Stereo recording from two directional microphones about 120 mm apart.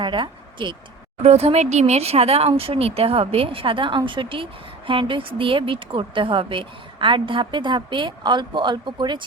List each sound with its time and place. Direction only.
0.0 s speech: 40° right (ahead or behind)
1.2 s speech: 60° right (ahead or behind); by 9.2 s 40° right (ahead or behind)